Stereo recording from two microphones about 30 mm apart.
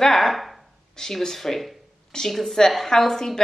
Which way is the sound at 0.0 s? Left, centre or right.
Centre.